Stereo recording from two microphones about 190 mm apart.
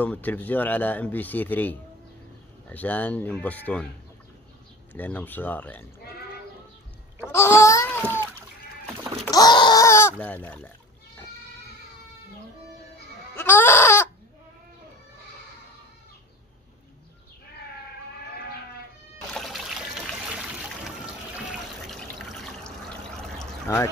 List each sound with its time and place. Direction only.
0.0 s speech: 10° left (ahead or behind)
4.9 s speech: 10° left (ahead or behind)
7.2 s a sound: 15° left (ahead or behind)
9.3 s a sound: 20° left (ahead or behind)
10.2 s speech: 10° left (ahead or behind)
13.4 s baby cry: 10° left (ahead or behind)
19.3 s water: centre (ahead or behind)
21.8 s water: centre (ahead or behind)
23.7 s speech: 15° left (ahead or behind)